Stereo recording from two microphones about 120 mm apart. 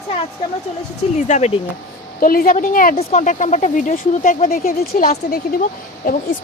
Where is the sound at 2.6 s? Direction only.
75° left (ahead or behind).